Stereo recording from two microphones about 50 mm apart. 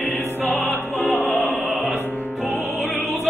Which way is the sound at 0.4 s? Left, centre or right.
Left.